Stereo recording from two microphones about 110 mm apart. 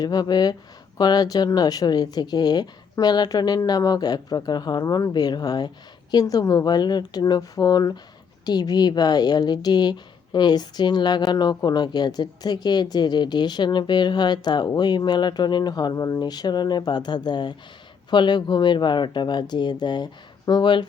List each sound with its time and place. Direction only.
0.0 s speech: 35° left (ahead or behind)